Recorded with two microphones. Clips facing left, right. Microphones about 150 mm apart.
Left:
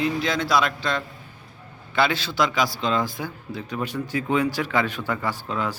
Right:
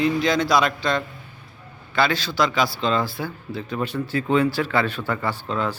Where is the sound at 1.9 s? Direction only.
20° left (ahead or behind).